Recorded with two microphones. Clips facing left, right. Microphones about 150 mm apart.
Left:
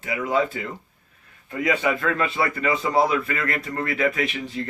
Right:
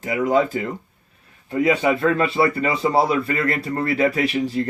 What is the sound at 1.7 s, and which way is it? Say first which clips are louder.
Speech: right 4 dB; 30° right (ahead or behind).